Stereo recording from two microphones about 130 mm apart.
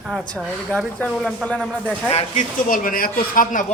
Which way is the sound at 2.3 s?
90° left.